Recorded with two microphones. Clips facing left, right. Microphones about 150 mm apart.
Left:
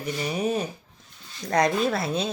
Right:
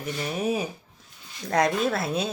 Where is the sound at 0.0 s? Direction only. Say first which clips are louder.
Left 1 dB; centre (ahead or behind).